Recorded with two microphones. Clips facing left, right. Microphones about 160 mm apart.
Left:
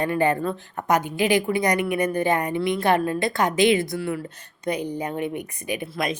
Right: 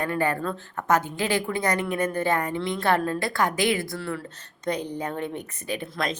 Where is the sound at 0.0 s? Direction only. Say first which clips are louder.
Left 4 dB; 20° left (ahead or behind).